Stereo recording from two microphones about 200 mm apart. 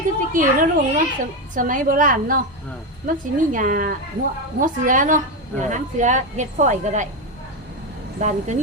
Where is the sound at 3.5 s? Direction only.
40° right (ahead or behind).